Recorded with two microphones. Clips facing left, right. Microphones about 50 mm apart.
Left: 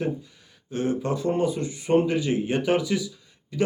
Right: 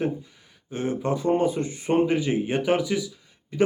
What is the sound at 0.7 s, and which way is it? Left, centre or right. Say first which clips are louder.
Speech: even; centre.